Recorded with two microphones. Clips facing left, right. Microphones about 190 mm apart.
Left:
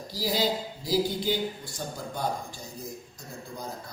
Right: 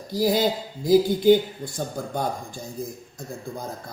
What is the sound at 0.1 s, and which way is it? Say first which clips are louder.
A man's voice: right 7 dB; 50° right (ahead or behind).